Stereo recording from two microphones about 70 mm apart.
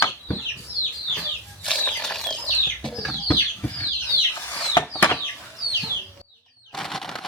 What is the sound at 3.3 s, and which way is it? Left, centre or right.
Chicken, left.